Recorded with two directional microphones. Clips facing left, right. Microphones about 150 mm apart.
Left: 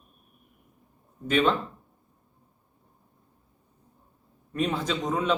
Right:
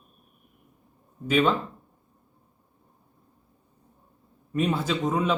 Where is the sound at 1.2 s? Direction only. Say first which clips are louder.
Right 1 dB; 5° right (ahead or behind).